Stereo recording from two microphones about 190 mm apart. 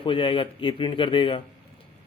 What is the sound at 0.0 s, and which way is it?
Speech, 25° left (ahead or behind).